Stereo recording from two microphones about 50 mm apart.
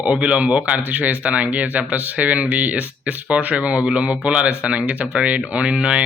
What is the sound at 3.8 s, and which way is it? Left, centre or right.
Speech, centre.